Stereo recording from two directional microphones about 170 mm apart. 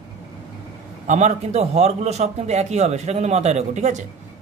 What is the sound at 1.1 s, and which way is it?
A man's voice, 45° right (ahead or behind).